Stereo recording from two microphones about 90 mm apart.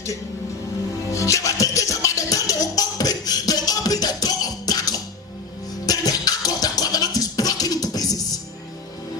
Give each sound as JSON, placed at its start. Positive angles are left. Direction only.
{"t": 1.1, "sound": "music", "side_deg": 35}